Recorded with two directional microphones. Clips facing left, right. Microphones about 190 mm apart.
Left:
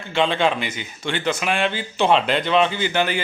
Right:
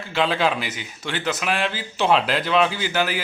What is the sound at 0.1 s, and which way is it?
A man's voice, 5° right (ahead or behind).